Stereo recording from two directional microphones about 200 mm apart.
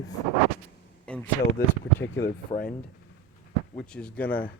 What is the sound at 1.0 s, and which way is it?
Speech, 5° left (ahead or behind).